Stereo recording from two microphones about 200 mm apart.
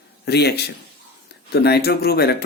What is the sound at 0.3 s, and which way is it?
Speech, 55° left (ahead or behind).